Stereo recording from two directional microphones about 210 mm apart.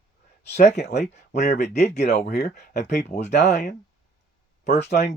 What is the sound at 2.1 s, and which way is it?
Speech, 50° left (ahead or behind).